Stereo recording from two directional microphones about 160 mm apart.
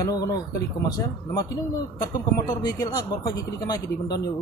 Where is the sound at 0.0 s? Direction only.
20° left (ahead or behind).